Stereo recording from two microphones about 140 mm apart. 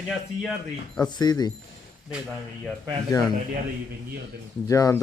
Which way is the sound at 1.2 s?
30° left (ahead or behind).